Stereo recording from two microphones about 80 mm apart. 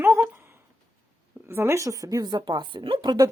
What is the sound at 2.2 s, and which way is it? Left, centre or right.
Speech, right.